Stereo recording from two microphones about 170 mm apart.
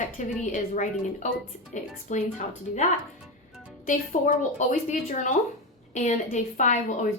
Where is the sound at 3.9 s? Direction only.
50° left (ahead or behind).